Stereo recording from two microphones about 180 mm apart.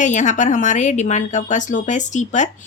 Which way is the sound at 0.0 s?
40° left (ahead or behind).